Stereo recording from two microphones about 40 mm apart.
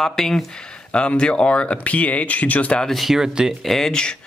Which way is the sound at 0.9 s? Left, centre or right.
Left.